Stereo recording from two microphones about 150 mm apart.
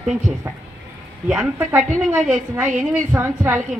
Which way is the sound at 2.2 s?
10° right (ahead or behind).